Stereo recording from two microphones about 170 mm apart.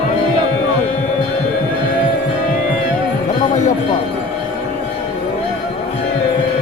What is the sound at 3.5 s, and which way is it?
Music, 45° left (ahead or behind).